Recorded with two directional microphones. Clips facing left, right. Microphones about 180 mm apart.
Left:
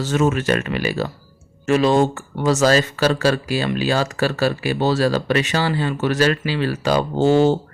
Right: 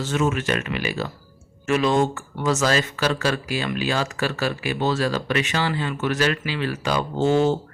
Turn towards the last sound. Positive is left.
turn(degrees=35)  # may be behind; listen again after turning